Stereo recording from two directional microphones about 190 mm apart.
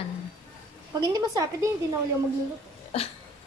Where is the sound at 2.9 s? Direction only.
30° left (ahead or behind).